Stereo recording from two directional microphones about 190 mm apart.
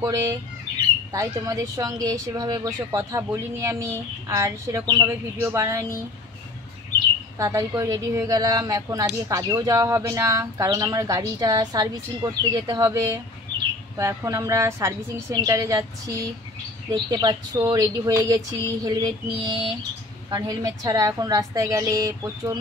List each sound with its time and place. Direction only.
0.0 s a woman's voice: 15° right (ahead or behind)
7.3 s a woman's voice: 15° right (ahead or behind)